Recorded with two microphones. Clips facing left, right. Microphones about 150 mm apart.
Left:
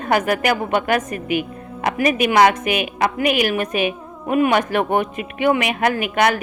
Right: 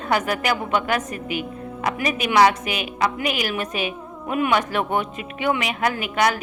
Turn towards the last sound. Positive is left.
turn(degrees=55)  # may be behind; listen again after turning